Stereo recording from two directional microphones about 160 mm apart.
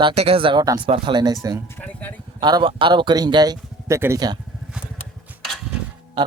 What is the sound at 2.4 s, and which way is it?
Speech, 30° right (ahead or behind).